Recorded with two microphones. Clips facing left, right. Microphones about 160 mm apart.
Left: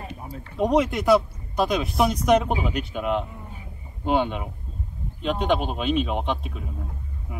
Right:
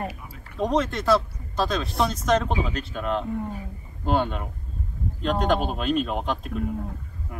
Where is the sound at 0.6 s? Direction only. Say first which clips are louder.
Left 3 dB; 10° left (ahead or behind).